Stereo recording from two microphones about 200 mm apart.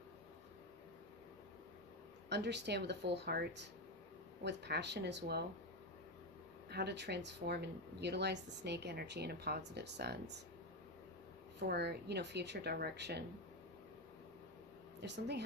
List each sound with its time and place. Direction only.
2.3 s speech: 60° right (ahead or behind)
6.7 s speech: 55° right (ahead or behind)
11.6 s speech: 55° right (ahead or behind)
15.0 s speech: 60° right (ahead or behind)